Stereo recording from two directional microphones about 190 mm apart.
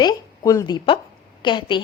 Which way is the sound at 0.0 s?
20° left (ahead or behind).